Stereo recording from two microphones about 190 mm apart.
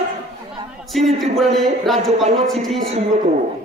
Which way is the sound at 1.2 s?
Centre (ahead or behind).